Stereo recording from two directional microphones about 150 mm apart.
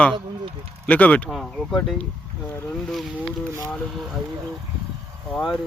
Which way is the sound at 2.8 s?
Centre (ahead or behind).